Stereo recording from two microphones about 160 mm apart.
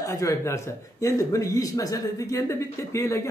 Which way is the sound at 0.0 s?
20° left (ahead or behind).